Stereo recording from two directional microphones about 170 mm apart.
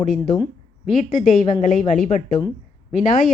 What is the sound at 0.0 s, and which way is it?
A woman's voice, 50° left (ahead or behind).